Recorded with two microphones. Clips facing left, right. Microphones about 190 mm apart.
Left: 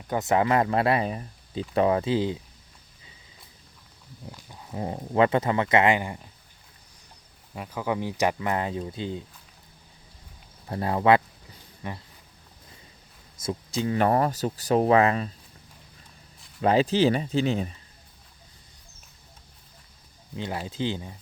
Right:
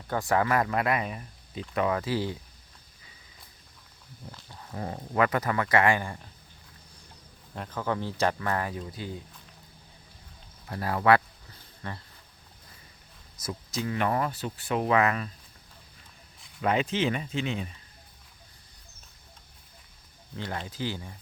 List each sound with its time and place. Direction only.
0.1 s speech: 20° left (ahead or behind)
4.3 s speech: 15° left (ahead or behind)
7.5 s speech: 10° left (ahead or behind); by 9.2 s 25° left (ahead or behind)
10.7 s a sound: 25° left (ahead or behind)
13.4 s speech: 30° left (ahead or behind)
16.6 s speech: 35° left (ahead or behind)
20.3 s speech: 15° left (ahead or behind)